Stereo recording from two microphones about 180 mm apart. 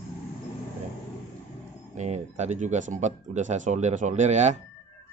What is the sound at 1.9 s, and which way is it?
Speech, 40° right (ahead or behind).